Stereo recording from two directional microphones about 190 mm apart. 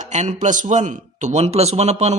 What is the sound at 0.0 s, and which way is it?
A man's voice, 40° right (ahead or behind).